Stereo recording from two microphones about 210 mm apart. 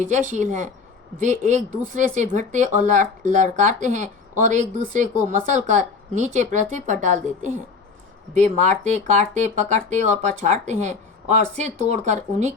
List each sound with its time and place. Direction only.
0.0 s speech: 35° right (ahead or behind)